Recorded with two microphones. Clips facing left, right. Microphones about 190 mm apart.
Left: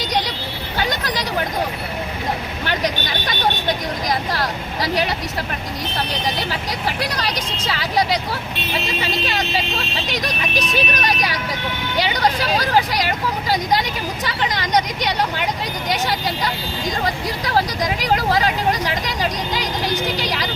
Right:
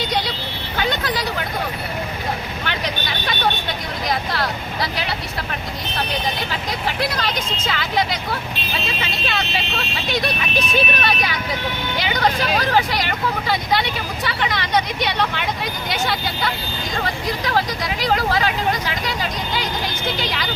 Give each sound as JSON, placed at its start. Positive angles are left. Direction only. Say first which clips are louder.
{"t": 0.9, "sound": "vehicle", "louder": "right 5 dB", "side_deg": 40}
{"t": 2.6, "sound": "vehicle", "louder": "left 4 dB", "side_deg": 40}
{"t": 4.1, "sound": "speech", "louder": "right 1 dB", "side_deg": 40}
{"t": 7.0, "sound": "speech", "louder": "right 1 dB", "side_deg": 35}
{"t": 10.5, "sound": "speech", "louder": "even", "side_deg": 15}
{"t": 10.8, "sound": "speech", "louder": "right 1 dB", "side_deg": 40}